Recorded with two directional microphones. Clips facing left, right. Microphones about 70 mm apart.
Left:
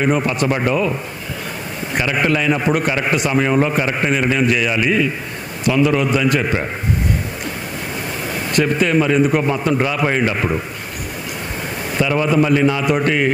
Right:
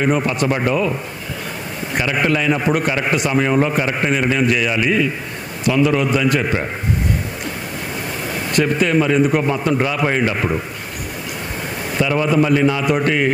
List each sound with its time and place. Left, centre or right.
0.0 s a man's voice: left
2.0 s a man's voice: left
8.3 s a man's voice: left
11.9 s a man's voice: left